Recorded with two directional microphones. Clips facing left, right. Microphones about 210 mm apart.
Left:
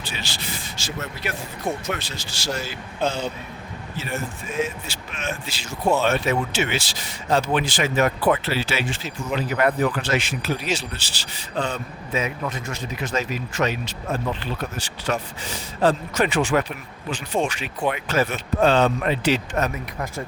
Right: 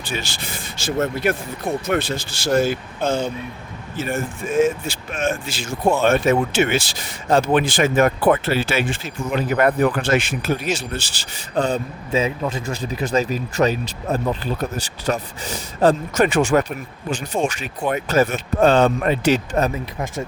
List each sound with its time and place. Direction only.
0.0 s speech: 50° right (ahead or behind)
19.5 s speech: 30° right (ahead or behind)